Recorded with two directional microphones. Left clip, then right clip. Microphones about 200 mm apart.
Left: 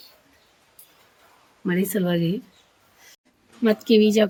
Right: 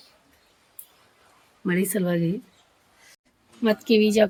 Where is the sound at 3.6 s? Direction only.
5° right (ahead or behind).